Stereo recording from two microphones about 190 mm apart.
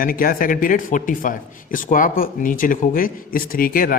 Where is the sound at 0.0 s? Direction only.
50° left (ahead or behind).